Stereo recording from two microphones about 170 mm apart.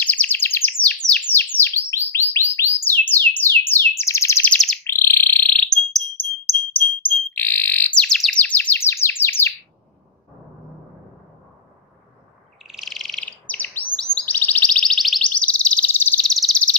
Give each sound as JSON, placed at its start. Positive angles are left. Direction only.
{"t": 0.0, "sound": "bird", "side_deg": 10}
{"t": 9.2, "sound": "chirp", "side_deg": 10}
{"t": 12.6, "sound": "bird", "side_deg": 0}